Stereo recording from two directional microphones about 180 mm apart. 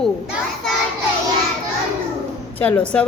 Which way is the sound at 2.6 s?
5° left (ahead or behind).